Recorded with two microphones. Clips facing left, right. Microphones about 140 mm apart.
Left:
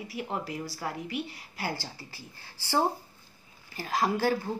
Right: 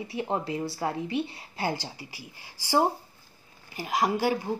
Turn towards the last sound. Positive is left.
turn(degrees=-15)  # may be behind; listen again after turning